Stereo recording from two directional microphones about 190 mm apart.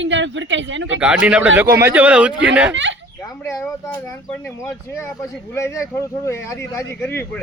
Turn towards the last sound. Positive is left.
turn(degrees=10)  # may be behind; listen again after turning